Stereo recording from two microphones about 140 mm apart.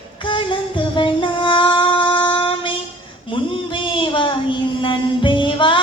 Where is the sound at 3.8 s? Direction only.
35° left (ahead or behind).